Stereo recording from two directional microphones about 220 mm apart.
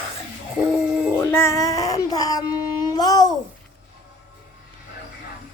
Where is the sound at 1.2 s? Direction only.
10° left (ahead or behind).